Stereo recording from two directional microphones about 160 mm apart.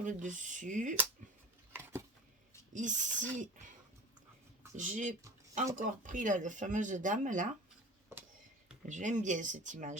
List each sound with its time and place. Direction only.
0.0 s speech: 50° right (ahead or behind)
2.7 s speech: 50° right (ahead or behind)
4.8 s speech: 50° right (ahead or behind)
8.9 s speech: 50° right (ahead or behind)